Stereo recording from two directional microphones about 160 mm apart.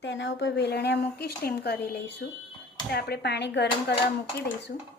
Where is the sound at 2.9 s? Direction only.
75° left (ahead or behind).